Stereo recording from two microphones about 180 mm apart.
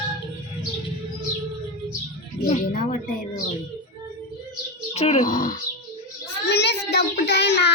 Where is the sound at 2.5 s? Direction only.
50° left (ahead or behind).